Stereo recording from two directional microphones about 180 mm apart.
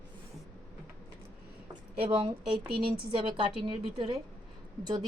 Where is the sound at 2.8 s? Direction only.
30° right (ahead or behind).